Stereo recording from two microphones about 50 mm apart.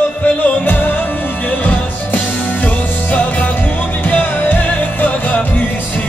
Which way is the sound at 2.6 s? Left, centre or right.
Left.